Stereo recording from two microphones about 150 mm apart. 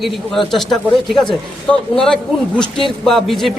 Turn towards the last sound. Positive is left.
turn(degrees=0)  # may be behind; listen again after turning